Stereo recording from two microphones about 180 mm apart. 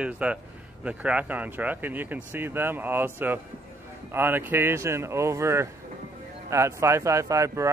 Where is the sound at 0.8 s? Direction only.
5° right (ahead or behind).